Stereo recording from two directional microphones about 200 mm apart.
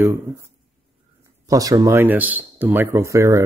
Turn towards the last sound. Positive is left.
turn(degrees=-15)  # may be behind; listen again after turning